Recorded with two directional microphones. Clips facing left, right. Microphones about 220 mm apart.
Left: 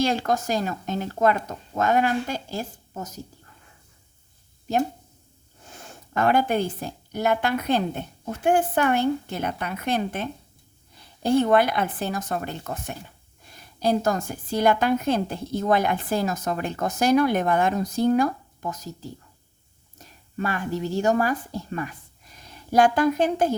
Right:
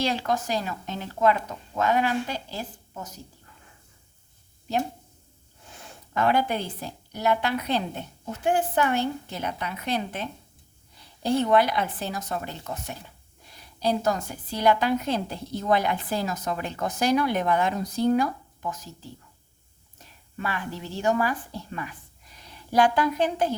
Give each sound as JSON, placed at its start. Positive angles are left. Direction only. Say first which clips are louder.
{"t": 0.0, "sound": "a woman's voice", "louder": "left 3 dB", "side_deg": 45}
{"t": 5.7, "sound": "a woman's voice", "louder": "left 2 dB", "side_deg": 45}